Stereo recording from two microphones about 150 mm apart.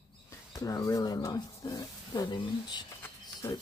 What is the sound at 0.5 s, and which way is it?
Speech, 25° left (ahead or behind).